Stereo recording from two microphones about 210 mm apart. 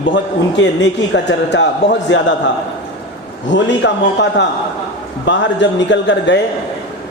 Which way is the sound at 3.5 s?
55° left (ahead or behind).